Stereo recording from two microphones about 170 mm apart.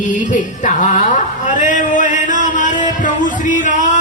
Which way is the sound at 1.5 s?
50° left (ahead or behind).